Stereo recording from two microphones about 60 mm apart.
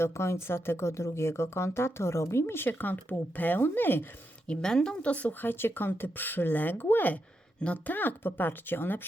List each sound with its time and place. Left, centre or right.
0.0 s speech: left
4.4 s speech: centre
5.4 s speech: left
7.6 s speech: left